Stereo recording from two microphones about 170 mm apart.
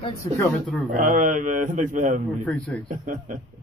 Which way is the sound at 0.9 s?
50° right (ahead or behind).